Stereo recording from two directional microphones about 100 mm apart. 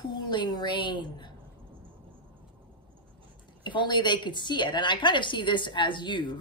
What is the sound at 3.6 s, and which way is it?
A woman's voice, 50° left (ahead or behind).